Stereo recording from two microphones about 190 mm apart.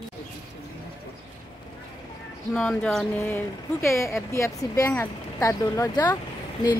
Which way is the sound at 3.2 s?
15° left (ahead or behind).